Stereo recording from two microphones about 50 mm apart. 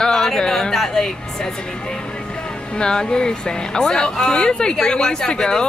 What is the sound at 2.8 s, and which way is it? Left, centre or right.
Speech, centre.